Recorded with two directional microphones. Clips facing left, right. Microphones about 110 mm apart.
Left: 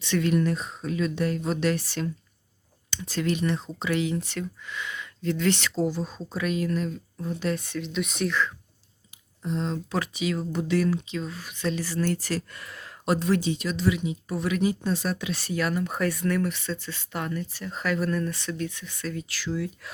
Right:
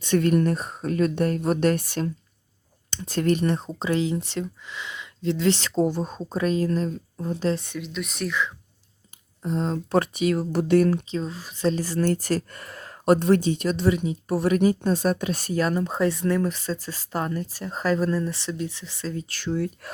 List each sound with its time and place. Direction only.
0.0 s speech: 50° right (ahead or behind)
3.7 s speech: 30° right (ahead or behind)
5.7 s speech: 45° right (ahead or behind)
7.6 s speech: 15° right (ahead or behind)
7.9 s speech: centre (ahead or behind)
9.4 s speech: 45° right (ahead or behind)
11.2 s speech: 30° right (ahead or behind)